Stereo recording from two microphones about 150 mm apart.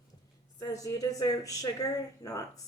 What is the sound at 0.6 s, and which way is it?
A woman's voice, 20° left (ahead or behind).